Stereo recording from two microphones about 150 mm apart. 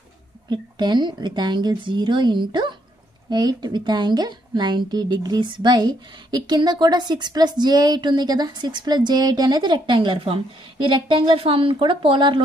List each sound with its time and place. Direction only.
0.5 s a woman's voice: 30° right (ahead or behind)